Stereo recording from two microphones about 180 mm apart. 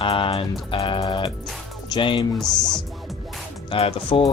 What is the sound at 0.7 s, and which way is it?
Music, 30° left (ahead or behind).